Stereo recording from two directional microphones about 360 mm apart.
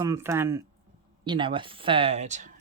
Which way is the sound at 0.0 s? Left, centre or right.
Centre.